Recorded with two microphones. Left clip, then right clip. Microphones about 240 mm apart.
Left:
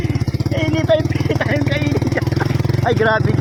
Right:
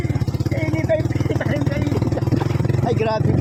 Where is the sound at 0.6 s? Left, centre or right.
Centre.